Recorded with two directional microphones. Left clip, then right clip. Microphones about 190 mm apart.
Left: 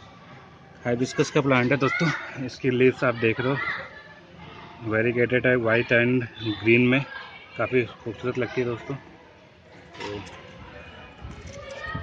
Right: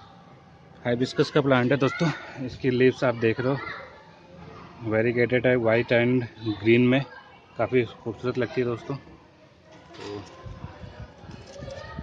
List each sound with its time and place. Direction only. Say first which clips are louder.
0.8 s speech: even; 5° right (ahead or behind)
4.8 s speech: even; centre (ahead or behind)